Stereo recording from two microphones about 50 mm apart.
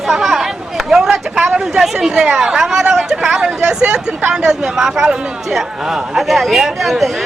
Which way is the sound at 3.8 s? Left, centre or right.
Centre.